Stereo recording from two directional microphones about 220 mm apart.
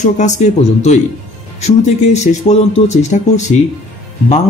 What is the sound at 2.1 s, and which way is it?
A man's voice, 30° left (ahead or behind).